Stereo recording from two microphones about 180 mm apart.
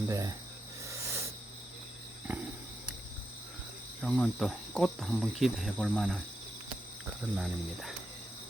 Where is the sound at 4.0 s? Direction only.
5° left (ahead or behind).